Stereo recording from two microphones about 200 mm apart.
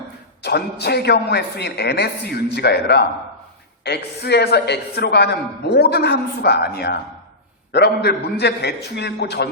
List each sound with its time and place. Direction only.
0.4 s a man's voice: 55° left (ahead or behind)